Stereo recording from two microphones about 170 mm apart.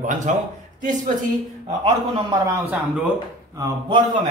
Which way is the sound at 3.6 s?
25° right (ahead or behind).